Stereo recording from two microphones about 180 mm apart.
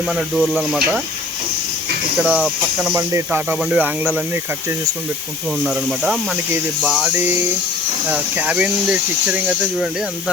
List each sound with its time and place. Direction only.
0.1 s speech: centre (ahead or behind)
2.2 s speech: 5° right (ahead or behind)
3.1 s speech: 15° right (ahead or behind)
3.5 s speech: 5° right (ahead or behind)
5.6 s speech: 5° right (ahead or behind)